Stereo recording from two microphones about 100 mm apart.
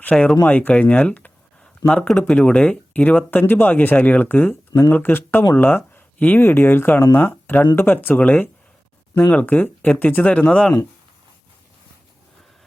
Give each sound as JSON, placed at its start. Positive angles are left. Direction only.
{"t": 0.0, "sound": "speech", "side_deg": 10}